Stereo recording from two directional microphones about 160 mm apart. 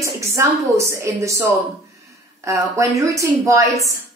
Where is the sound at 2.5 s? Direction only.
20° right (ahead or behind).